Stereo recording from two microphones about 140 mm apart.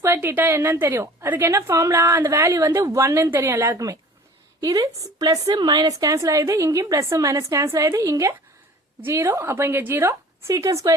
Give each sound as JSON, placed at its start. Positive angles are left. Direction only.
{"t": 0.0, "sound": "a woman's voice", "side_deg": -15}